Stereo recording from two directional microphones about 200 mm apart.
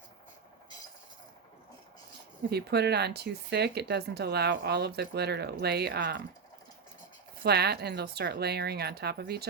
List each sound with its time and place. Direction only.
2.5 s speech: 55° right (ahead or behind)
7.4 s speech: 55° right (ahead or behind)